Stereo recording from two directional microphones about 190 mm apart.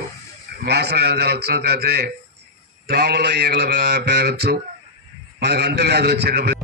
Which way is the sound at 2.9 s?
60° right (ahead or behind).